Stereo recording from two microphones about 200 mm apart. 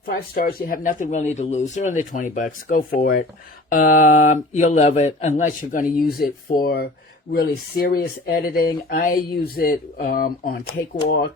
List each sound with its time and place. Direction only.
0.0 s speech: 45° left (ahead or behind)